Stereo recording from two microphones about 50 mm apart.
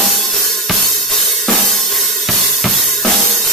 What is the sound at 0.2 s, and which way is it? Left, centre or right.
Drum kit, centre.